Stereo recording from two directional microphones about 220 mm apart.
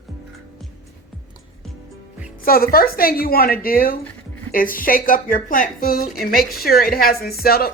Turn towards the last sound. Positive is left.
turn(degrees=45)  # may be behind; listen again after turning